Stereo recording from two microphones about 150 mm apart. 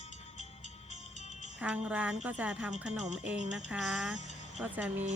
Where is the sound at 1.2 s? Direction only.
50° left (ahead or behind).